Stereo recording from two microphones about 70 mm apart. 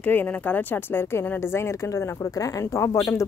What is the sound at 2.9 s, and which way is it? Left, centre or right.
Speech, left.